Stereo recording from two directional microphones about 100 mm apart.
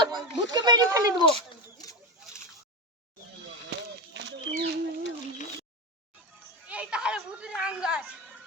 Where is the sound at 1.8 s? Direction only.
40° left (ahead or behind).